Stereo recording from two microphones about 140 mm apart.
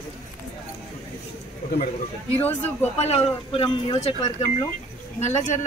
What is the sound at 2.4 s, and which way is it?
Speech, 15° left (ahead or behind).